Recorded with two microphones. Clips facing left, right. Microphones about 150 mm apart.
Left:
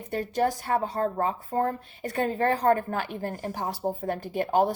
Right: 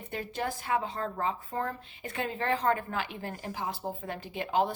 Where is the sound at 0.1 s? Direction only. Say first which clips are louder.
Left 8 dB; 40° left (ahead or behind).